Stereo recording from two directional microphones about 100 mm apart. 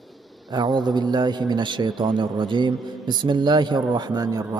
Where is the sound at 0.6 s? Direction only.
45° right (ahead or behind).